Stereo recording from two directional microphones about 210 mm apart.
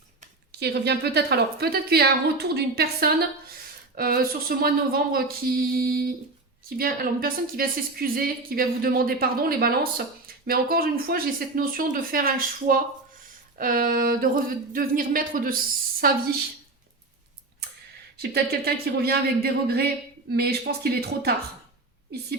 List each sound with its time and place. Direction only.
0.6 s a woman's voice: 50° right (ahead or behind)
18.2 s a woman's voice: 50° right (ahead or behind)